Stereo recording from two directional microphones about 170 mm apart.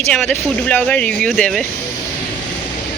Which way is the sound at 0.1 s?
5° left (ahead or behind).